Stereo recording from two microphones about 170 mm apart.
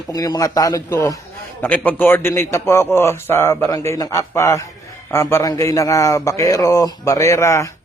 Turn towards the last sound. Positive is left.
turn(degrees=15)  # may be behind; listen again after turning